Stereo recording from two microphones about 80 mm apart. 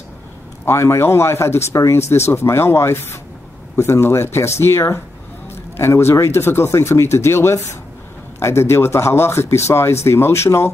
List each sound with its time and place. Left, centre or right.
0.7 s speech: left